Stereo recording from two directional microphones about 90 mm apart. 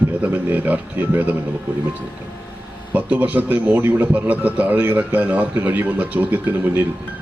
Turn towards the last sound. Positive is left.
turn(degrees=-20)  # may be behind; listen again after turning